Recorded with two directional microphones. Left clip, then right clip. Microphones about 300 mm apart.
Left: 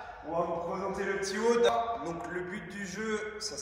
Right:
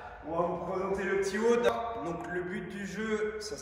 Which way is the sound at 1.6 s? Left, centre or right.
Centre.